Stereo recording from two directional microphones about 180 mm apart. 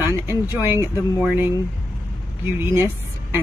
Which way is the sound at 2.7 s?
15° right (ahead or behind).